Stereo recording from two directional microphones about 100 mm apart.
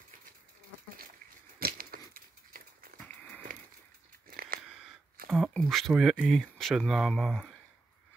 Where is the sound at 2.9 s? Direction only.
15° left (ahead or behind).